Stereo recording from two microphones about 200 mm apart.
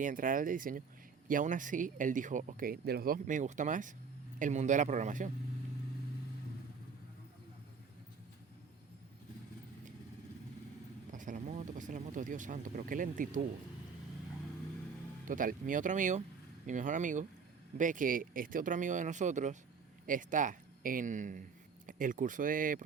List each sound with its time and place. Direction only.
0.0 s speech: 40° right (ahead or behind)
11.1 s speech: 40° right (ahead or behind)
15.2 s speech: 40° right (ahead or behind)